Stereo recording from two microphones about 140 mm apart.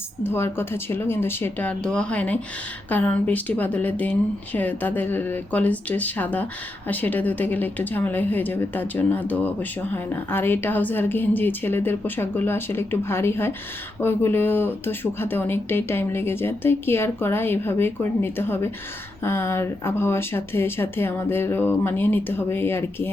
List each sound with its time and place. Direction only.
0.2 s a woman's voice: 15° left (ahead or behind)